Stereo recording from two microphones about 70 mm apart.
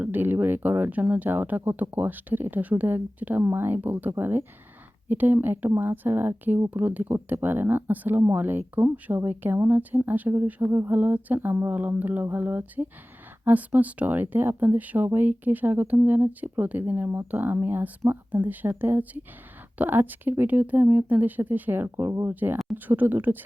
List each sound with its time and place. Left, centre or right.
0.0 s speech: right
10.6 s speech: right